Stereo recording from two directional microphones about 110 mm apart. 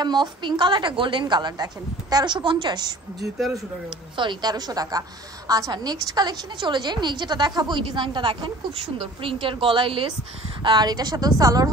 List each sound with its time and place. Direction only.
0.0 s a woman's voice: 40° right (ahead or behind)
4.2 s a woman's voice: 40° right (ahead or behind)